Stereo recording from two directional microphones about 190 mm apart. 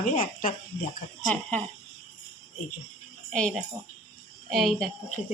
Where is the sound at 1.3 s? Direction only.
5° left (ahead or behind).